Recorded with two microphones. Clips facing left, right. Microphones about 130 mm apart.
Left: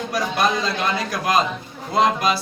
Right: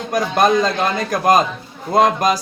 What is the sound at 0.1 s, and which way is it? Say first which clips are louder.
A man's voice: right 7 dB; 50° right (ahead or behind).